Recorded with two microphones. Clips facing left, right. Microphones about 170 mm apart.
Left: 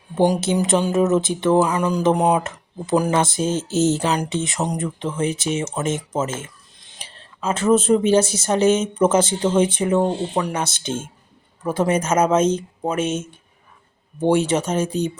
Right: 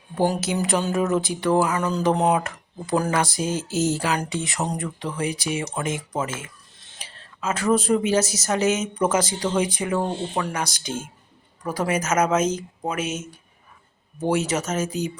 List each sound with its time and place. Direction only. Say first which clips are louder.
0.2 s speech: left 4 dB; 25° left (ahead or behind)
6.7 s a sound: left 1 dB; 15° left (ahead or behind)
7.0 s speech: left 3 dB; 30° left (ahead or behind)
14.4 s speech: left 4 dB; 30° left (ahead or behind)